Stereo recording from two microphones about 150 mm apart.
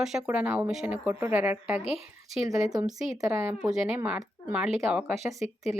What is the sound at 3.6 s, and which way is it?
Speech, 5° right (ahead or behind).